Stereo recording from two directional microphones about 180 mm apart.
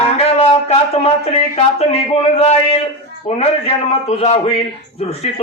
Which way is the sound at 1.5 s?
35° left (ahead or behind).